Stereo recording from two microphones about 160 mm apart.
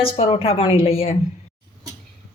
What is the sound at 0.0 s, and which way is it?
A woman's voice, 35° left (ahead or behind).